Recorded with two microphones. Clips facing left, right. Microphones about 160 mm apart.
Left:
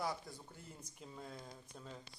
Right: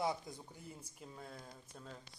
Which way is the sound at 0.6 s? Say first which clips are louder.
Right 2 dB; 10° right (ahead or behind).